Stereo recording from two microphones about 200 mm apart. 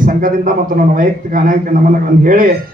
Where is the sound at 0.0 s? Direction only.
45° right (ahead or behind).